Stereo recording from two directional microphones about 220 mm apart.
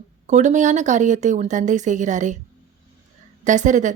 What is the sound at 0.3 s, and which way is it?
Speech, 35° right (ahead or behind).